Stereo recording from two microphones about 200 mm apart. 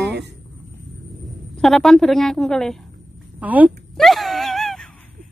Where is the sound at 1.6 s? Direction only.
Centre (ahead or behind).